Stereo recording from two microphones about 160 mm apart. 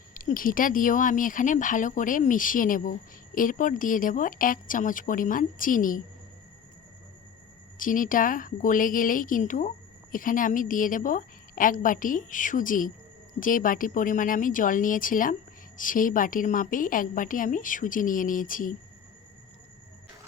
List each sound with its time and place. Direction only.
0.1 s speech: 60° left (ahead or behind)
7.8 s speech: 55° left (ahead or behind)